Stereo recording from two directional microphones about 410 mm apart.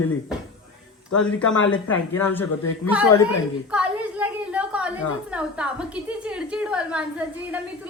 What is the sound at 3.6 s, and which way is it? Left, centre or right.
A woman's voice, centre.